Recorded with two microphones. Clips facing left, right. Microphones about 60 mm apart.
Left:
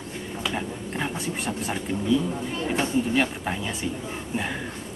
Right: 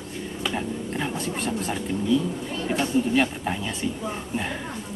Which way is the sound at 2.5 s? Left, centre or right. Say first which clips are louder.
Right 1 dB; left.